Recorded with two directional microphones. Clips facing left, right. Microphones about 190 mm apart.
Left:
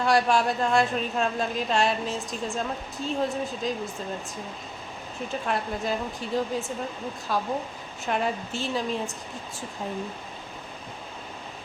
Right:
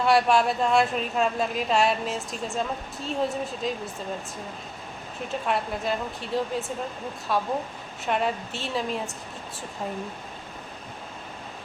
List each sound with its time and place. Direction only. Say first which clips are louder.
0.0 s a woman's voice: right 2 dB; 5° right (ahead or behind)
5.3 s a woman's voice: right 2 dB; centre (ahead or behind)